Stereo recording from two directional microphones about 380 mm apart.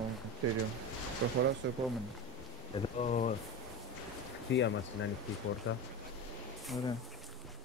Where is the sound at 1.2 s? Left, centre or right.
Right.